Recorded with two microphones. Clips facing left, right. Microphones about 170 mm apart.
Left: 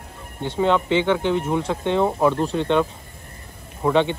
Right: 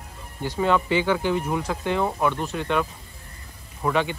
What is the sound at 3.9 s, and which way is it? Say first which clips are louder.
Speech: left 5 dB; 25° left (ahead or behind).